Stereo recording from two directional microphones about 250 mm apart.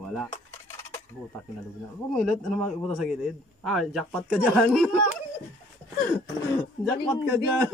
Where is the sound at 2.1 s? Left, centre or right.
Centre.